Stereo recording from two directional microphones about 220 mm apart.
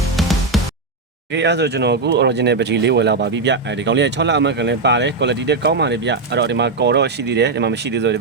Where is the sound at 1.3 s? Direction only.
50° right (ahead or behind).